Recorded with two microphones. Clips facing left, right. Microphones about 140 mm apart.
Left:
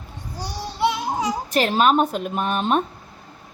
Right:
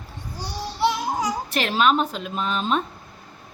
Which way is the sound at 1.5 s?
40° left (ahead or behind).